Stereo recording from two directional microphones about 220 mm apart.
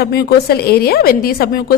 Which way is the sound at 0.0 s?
45° left (ahead or behind).